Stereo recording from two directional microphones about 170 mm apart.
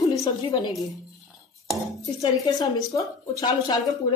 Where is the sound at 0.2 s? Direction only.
25° left (ahead or behind).